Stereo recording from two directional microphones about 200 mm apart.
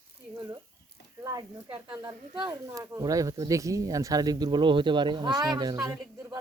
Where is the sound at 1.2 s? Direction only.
20° right (ahead or behind).